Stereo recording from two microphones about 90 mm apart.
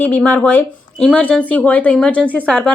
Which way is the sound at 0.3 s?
15° left (ahead or behind).